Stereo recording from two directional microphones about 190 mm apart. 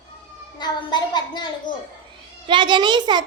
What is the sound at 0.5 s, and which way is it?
Speech, 25° left (ahead or behind).